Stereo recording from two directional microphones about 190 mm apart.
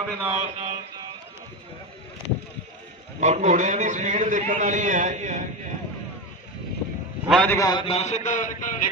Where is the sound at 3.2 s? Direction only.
40° right (ahead or behind).